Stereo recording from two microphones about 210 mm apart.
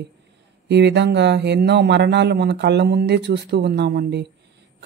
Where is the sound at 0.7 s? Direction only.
55° right (ahead or behind).